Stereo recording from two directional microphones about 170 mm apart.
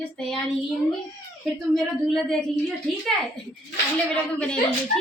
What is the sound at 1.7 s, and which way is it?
Speech, 5° left (ahead or behind).